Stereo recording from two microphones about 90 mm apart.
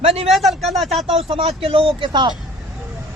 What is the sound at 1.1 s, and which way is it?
Speech, 90° right.